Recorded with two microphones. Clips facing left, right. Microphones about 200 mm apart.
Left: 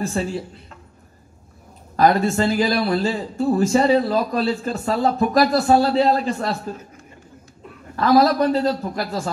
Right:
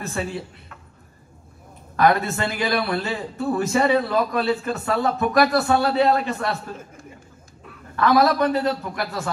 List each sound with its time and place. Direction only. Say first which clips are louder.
2.0 s speech: left 3 dB; 30° left (ahead or behind)
7.9 s a man's voice: left 2 dB; 30° left (ahead or behind)